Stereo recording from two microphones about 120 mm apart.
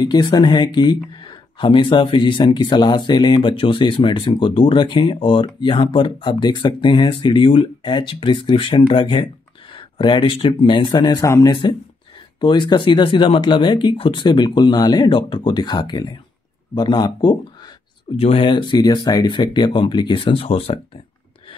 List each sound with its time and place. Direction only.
0.0 s speech: 35° left (ahead or behind)
11.2 s speech: 25° left (ahead or behind)
12.4 s speech: 40° left (ahead or behind)
18.1 s speech: 55° left (ahead or behind)